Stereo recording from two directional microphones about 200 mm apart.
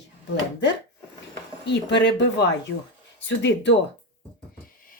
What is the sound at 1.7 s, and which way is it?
Speech, 60° left (ahead or behind).